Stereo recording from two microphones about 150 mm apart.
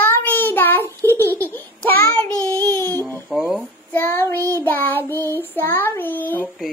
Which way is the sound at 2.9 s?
15° left (ahead or behind).